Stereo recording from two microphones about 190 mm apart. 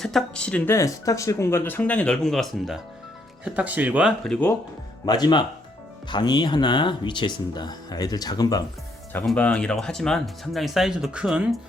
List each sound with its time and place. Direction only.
0.0 s speech: centre (ahead or behind)
5.0 s speech: 20° left (ahead or behind)
9.1 s speech: 5° left (ahead or behind)